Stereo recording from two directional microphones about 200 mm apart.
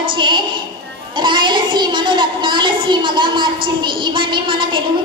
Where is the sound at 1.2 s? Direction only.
25° right (ahead or behind).